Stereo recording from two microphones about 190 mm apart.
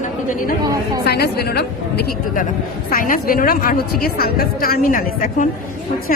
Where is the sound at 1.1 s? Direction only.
55° left (ahead or behind).